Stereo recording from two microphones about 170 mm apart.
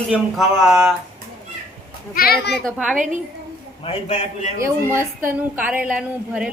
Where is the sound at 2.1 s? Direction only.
65° left (ahead or behind).